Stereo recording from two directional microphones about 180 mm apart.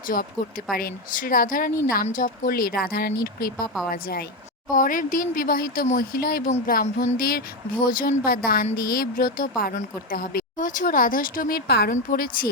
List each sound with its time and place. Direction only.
0.1 s speech: 55° left (ahead or behind)